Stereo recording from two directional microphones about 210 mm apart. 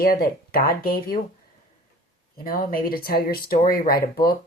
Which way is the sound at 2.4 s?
45° left (ahead or behind).